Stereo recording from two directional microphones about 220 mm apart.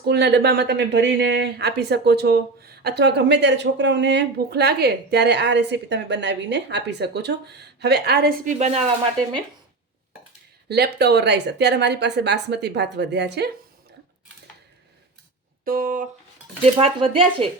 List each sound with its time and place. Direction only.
0.0 s speech: 50° right (ahead or behind)
8.5 s speech: 30° right (ahead or behind)
10.7 s speech: 45° right (ahead or behind)
15.6 s speech: 40° right (ahead or behind)
16.7 s speech: 25° right (ahead or behind)